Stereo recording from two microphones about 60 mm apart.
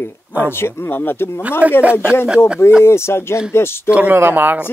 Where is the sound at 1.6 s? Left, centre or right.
Right.